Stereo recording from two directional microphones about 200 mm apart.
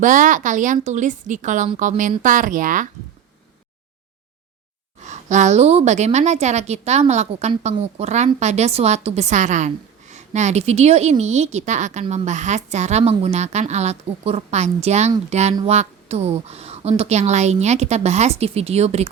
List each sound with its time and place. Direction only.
0.0 s a woman's voice: 40° right (ahead or behind)
5.0 s a woman's voice: 35° right (ahead or behind)